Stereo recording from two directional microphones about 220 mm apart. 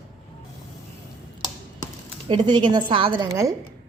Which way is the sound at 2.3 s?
20° right (ahead or behind).